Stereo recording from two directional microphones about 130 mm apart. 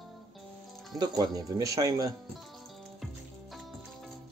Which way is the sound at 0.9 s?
30° right (ahead or behind).